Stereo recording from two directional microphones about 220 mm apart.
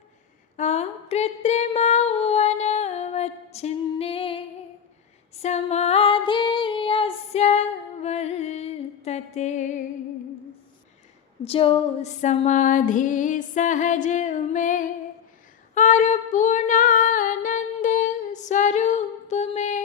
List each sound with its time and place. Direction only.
0.5 s a sound: 30° left (ahead or behind)
5.3 s female singing: 30° left (ahead or behind)
11.4 s music: 25° left (ahead or behind)
15.7 s female singing: 35° left (ahead or behind)